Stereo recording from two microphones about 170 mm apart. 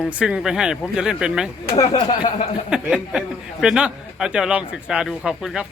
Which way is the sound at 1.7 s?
25° left (ahead or behind).